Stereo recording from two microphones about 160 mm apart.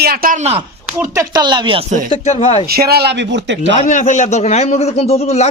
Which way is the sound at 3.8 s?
50° left (ahead or behind).